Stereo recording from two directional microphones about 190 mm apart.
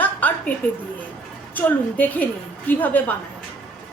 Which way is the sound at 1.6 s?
10° left (ahead or behind).